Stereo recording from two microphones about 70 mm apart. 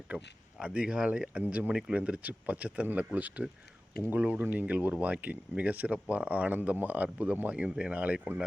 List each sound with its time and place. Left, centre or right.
0.6 s speech: centre